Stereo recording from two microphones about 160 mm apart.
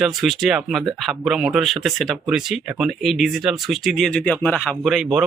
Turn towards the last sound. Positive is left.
turn(degrees=0)  # may be behind; listen again after turning